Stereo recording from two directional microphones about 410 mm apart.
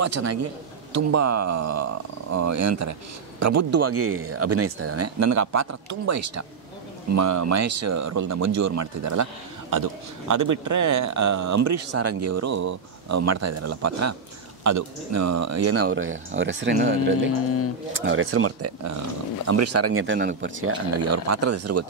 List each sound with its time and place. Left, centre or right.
0.0 s a man's voice: right
17.3 s speech: left
18.0 s a man's voice: right